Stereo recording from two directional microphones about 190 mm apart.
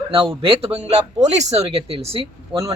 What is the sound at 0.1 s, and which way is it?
A man's voice, 30° right (ahead or behind).